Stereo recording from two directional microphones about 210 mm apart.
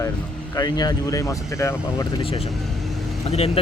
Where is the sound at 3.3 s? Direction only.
30° left (ahead or behind).